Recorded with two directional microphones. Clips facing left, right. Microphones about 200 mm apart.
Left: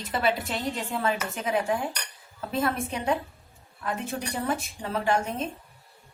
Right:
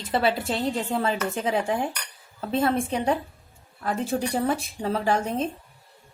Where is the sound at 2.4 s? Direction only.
30° right (ahead or behind).